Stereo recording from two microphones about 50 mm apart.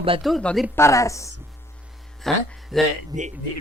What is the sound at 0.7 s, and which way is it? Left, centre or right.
Speech, left.